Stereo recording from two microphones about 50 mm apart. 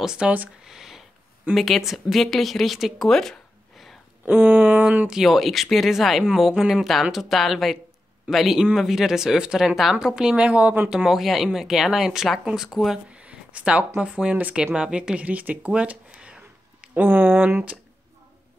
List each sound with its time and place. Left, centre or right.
0.0 s speech: centre
0.7 s a sound: centre
1.5 s speech: centre
3.1 s a sound: centre
4.3 s speech: right
5.2 s speech: centre
10.4 s speech: right
11.1 s speech: centre
13.1 s a sound: right
14.0 s speech: right
15.2 s speech: right
15.7 s a sound: right
16.9 s speech: right